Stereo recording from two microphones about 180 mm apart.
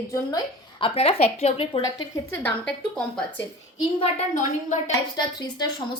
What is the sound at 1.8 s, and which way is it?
Speech, 15° left (ahead or behind).